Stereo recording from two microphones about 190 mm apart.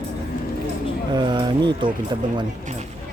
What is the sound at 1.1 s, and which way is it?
Speech, 25° right (ahead or behind).